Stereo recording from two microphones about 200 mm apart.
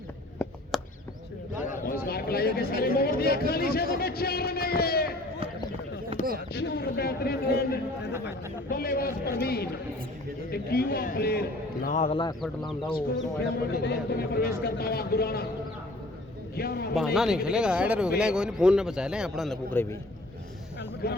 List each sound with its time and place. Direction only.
0.4 s a sound: 10° left (ahead or behind)
1.9 s a sound: 50° left (ahead or behind)
2.6 s a man's voice: 50° left (ahead or behind)
6.5 s a man's voice: 55° left (ahead or behind); by 12.3 s 30° left (ahead or behind)
12.4 s a man's voice: centre (ahead or behind)
13.4 s a man's voice: 55° left (ahead or behind)
16.6 s a man's voice: 50° left (ahead or behind)
17.2 s a man's voice: 5° right (ahead or behind)
19.7 s a man's voice: 10° left (ahead or behind)
21.0 s a man's voice: 50° left (ahead or behind)